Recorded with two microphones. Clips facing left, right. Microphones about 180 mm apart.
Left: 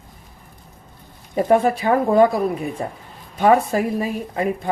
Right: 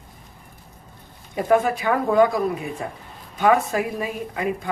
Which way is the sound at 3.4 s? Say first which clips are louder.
Left 3 dB; 35° left (ahead or behind).